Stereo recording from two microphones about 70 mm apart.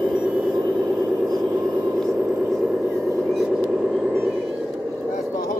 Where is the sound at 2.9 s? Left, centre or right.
Right.